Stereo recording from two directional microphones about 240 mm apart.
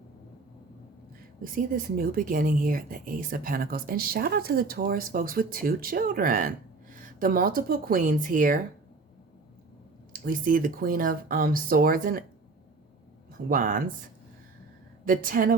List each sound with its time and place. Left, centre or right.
1.5 s speech: right
10.1 s speech: right
13.5 s speech: right
15.0 s speech: right